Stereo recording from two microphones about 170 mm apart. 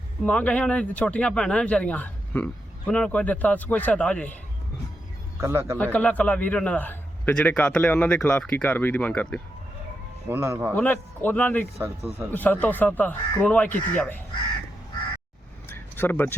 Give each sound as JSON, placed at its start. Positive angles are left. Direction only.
{"t": 0.3, "sound": "speech", "side_deg": 5}
{"t": 5.4, "sound": "speech", "side_deg": -15}
{"t": 5.7, "sound": "speech", "side_deg": 10}
{"t": 10.2, "sound": "speech", "side_deg": -15}
{"t": 10.8, "sound": "speech", "side_deg": 10}
{"t": 11.8, "sound": "speech", "side_deg": -10}
{"t": 12.3, "sound": "speech", "side_deg": 10}
{"t": 15.7, "sound": "a sound", "side_deg": 10}